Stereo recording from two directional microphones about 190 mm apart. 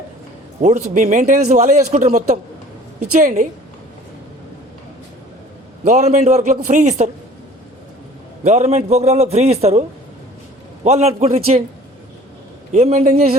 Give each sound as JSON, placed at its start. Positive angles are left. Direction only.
{"t": 0.6, "sound": "a man's voice", "side_deg": -40}
{"t": 5.8, "sound": "a man's voice", "side_deg": -40}
{"t": 8.4, "sound": "a man's voice", "side_deg": -35}
{"t": 10.8, "sound": "a man's voice", "side_deg": -35}
{"t": 12.7, "sound": "a man's voice", "side_deg": -35}